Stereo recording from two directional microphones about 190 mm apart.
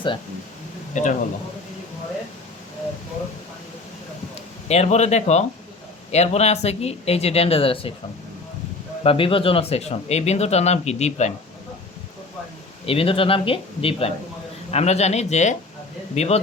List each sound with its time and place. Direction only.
0.9 s speech: 40° left (ahead or behind)
4.7 s speech: 35° left (ahead or behind)
9.0 s speech: 30° left (ahead or behind)
12.8 s speech: 30° left (ahead or behind)